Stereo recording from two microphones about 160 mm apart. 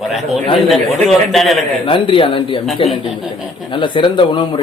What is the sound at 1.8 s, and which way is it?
Speech, 35° left (ahead or behind).